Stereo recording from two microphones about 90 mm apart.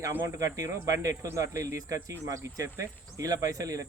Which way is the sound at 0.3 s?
35° right (ahead or behind).